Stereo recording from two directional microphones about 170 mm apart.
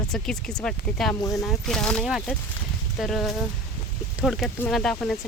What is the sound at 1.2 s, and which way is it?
Speech, 20° left (ahead or behind).